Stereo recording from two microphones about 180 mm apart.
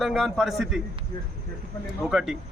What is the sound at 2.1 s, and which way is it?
Speech, 5° right (ahead or behind).